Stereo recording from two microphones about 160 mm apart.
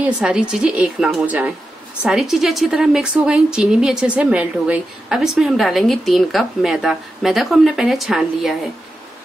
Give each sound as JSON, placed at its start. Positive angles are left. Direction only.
{"t": 0.0, "sound": "a woman's voice", "side_deg": -5}